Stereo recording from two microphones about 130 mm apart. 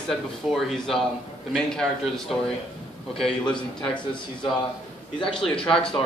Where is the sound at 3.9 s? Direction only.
40° left (ahead or behind).